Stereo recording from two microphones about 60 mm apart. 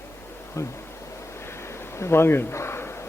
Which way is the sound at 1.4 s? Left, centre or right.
Left.